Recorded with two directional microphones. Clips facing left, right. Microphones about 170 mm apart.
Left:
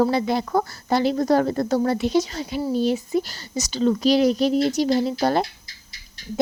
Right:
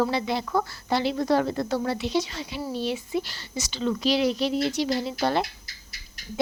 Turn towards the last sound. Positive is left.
turn(degrees=40)  # may be behind; listen again after turning